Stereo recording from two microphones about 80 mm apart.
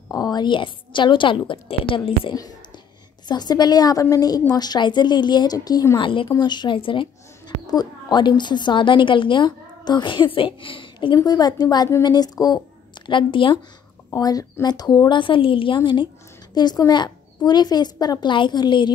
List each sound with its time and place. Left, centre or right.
0.1 s a woman's voice: left
3.3 s a woman's voice: left
5.9 s a woman's voice: left
6.3 s speech: left
7.6 s a woman's voice: left
11.1 s a woman's voice: left
13.0 s a woman's voice: left
14.1 s a woman's voice: left
16.5 s a woman's voice: left
18.2 s a woman's voice: left